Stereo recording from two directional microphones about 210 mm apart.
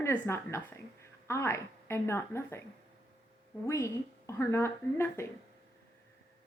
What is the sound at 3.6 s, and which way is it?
Speech, 15° left (ahead or behind).